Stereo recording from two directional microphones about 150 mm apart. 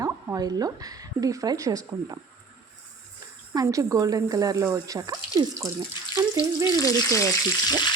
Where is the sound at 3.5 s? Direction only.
25° right (ahead or behind).